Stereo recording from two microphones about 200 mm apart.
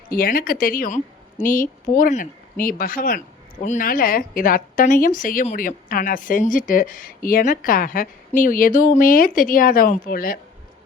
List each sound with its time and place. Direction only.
0.1 s a woman's voice: 45° left (ahead or behind)